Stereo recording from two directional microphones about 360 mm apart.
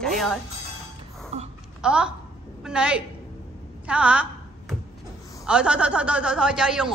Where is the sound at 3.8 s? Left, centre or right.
Centre.